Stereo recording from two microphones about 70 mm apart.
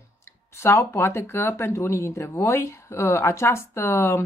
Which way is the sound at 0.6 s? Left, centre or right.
Left.